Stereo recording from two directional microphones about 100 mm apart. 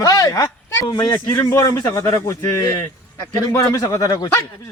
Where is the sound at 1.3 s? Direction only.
30° left (ahead or behind).